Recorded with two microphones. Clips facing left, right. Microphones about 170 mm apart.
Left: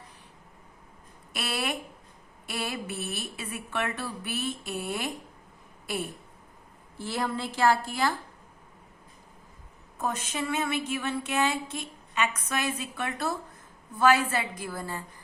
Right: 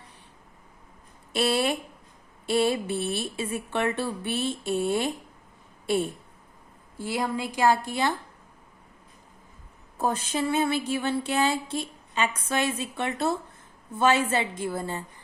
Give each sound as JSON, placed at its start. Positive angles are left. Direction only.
{"t": 1.3, "sound": "a woman's voice", "side_deg": -30}
{"t": 7.0, "sound": "a woman's voice", "side_deg": -15}
{"t": 10.0, "sound": "a sound", "side_deg": -30}
{"t": 13.9, "sound": "speech", "side_deg": -25}